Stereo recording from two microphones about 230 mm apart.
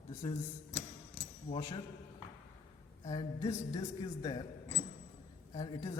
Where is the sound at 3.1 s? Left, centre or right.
Centre.